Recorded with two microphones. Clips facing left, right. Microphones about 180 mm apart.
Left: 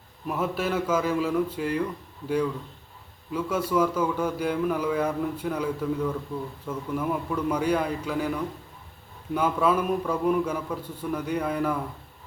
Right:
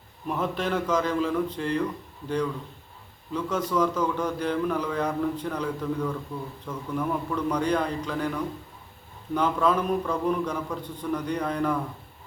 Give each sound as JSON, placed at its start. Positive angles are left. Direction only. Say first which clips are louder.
{"t": 0.3, "sound": "a man's voice", "louder": "even", "side_deg": 5}
{"t": 3.3, "sound": "a man's voice", "louder": "left 1 dB", "side_deg": 10}
{"t": 9.3, "sound": "a man's voice", "louder": "even", "side_deg": 5}